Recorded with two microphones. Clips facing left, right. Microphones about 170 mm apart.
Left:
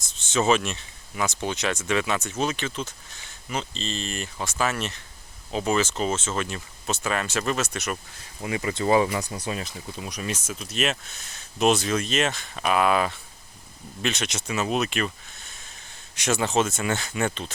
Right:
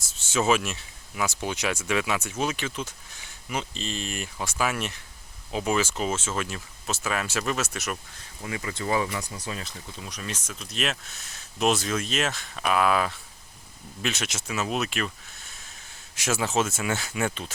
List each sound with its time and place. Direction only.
0.0 s speech: 5° right (ahead or behind)
8.4 s speech: 20° left (ahead or behind)
9.4 s speech: 15° left (ahead or behind); by 17.5 s 5° right (ahead or behind)